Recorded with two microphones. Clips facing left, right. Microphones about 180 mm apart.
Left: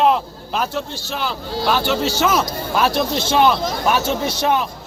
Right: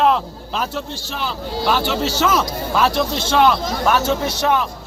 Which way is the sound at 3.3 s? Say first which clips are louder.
Right 1 dB; 15° left (ahead or behind).